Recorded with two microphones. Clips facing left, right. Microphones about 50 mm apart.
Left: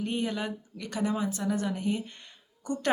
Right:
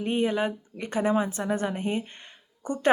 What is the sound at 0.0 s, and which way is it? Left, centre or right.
A woman's voice, right.